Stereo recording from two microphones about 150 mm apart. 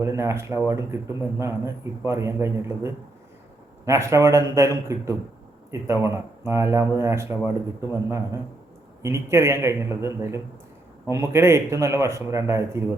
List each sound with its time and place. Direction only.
0.0 s a man's voice: 20° right (ahead or behind)